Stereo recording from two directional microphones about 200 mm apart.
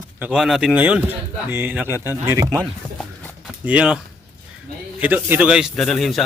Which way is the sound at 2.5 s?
5° left (ahead or behind).